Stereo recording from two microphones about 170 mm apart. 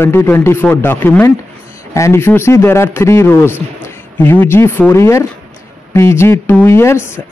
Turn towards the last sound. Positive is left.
turn(degrees=15)  # may be behind; listen again after turning